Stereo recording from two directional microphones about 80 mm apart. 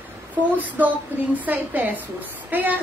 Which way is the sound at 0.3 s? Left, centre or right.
Centre.